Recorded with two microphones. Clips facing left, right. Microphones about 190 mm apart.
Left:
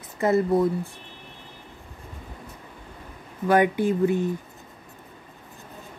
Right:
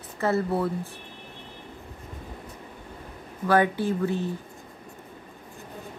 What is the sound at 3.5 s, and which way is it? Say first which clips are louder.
Speech: left 2 dB; 15° left (ahead or behind).